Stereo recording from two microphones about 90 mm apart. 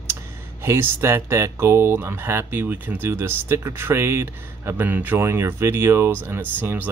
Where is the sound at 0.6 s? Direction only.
30° right (ahead or behind).